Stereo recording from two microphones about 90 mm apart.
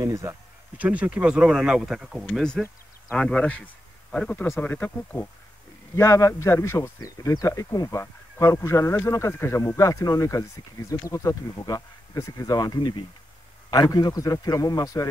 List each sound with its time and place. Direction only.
0.0 s speech: 35° right (ahead or behind)
0.7 s speech: 15° right (ahead or behind); by 5.3 s 20° left (ahead or behind)
5.9 s speech: 35° left (ahead or behind); by 13.0 s 55° left (ahead or behind)
13.7 s a man's voice: 45° left (ahead or behind)